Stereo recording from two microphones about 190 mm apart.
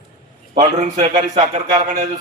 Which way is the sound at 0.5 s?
40° right (ahead or behind).